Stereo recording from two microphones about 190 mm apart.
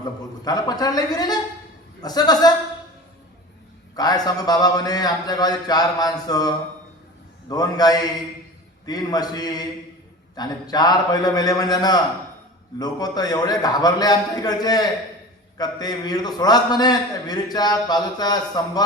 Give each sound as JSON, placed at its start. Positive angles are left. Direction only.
{"t": 0.4, "sound": "a man's voice", "side_deg": 20}
{"t": 3.9, "sound": "a man's voice", "side_deg": 20}
{"t": 7.5, "sound": "a man's voice", "side_deg": 20}